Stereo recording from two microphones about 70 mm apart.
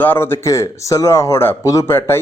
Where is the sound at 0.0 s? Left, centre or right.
Left.